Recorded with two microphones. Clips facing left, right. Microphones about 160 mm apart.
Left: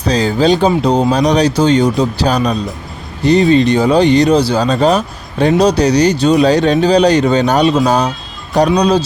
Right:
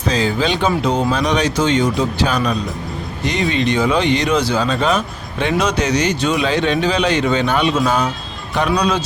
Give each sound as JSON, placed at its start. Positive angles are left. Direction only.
{"t": 0.1, "sound": "speech", "side_deg": 40}